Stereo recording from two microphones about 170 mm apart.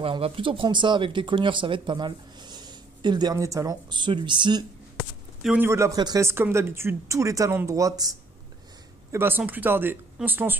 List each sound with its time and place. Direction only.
0.0 s speech: 30° right (ahead or behind)
5.4 s speech: 10° right (ahead or behind)